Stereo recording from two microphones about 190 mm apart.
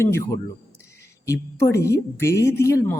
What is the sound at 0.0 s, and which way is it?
Speech, 15° left (ahead or behind).